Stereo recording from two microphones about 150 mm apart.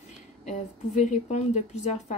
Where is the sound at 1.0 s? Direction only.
50° left (ahead or behind).